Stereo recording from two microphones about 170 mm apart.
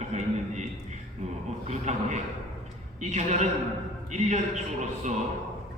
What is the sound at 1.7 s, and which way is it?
A woman's voice, 40° right (ahead or behind).